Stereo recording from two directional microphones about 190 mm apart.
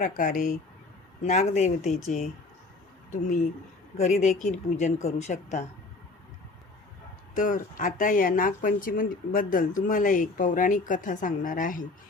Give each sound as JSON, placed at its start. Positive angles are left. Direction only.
{"t": 0.0, "sound": "speech", "side_deg": 45}
{"t": 7.3, "sound": "speech", "side_deg": 40}